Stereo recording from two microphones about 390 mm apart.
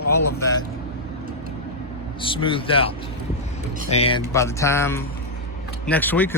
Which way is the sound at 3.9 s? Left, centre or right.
Centre.